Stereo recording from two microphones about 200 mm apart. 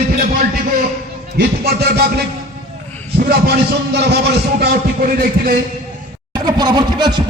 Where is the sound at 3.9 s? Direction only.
55° right (ahead or behind).